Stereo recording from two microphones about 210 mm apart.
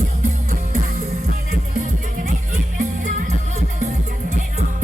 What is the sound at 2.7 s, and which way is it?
Music, 40° right (ahead or behind).